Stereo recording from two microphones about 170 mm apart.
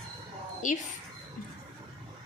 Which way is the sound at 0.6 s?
50° left (ahead or behind).